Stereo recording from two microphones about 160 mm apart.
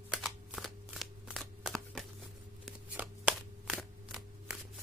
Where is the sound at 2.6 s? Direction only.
10° right (ahead or behind).